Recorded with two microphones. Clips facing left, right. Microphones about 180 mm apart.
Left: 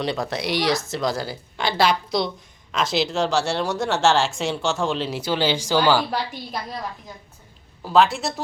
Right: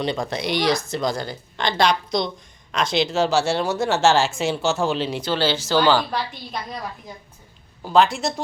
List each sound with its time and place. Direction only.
0.0 s speech: centre (ahead or behind)
7.8 s speech: centre (ahead or behind)